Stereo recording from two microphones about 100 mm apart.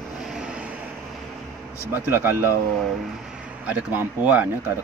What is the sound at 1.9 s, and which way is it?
Speech, 20° right (ahead or behind).